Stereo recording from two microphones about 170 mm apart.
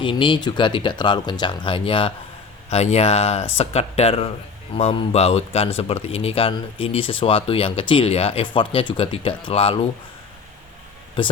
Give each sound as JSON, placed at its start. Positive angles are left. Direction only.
{"t": 0.0, "sound": "speech", "side_deg": 30}